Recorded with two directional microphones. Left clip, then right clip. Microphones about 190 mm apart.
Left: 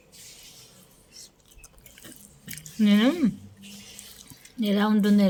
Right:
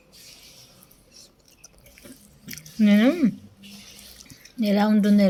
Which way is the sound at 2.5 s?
Centre (ahead or behind).